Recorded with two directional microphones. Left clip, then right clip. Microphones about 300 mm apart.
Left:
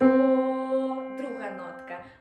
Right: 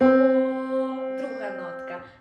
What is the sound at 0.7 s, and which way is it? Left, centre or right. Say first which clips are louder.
Music: right 2 dB; right.